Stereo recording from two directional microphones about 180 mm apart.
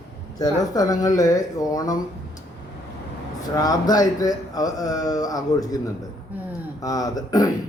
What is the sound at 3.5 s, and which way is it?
A man's voice, 20° left (ahead or behind).